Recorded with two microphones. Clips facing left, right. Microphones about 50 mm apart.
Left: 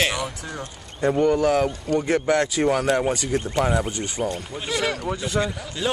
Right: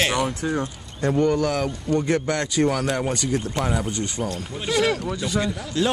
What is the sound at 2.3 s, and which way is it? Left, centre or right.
Speech, centre.